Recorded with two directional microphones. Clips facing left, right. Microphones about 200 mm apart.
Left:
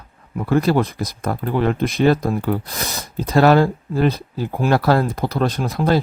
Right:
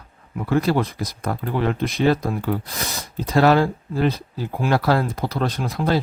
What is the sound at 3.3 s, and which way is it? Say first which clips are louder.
Speech: left 3 dB; 45° left (ahead or behind).